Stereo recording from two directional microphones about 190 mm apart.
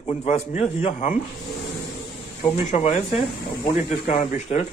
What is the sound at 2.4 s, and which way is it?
Speech, 35° left (ahead or behind).